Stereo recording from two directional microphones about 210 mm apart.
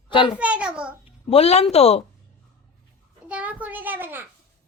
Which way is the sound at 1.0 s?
30° left (ahead or behind).